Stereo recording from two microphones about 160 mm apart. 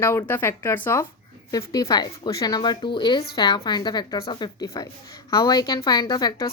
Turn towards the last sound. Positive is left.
turn(degrees=25)  # may be behind; listen again after turning